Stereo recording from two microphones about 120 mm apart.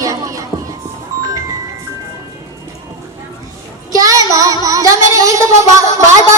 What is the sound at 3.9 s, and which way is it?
Child singing, 30° right (ahead or behind).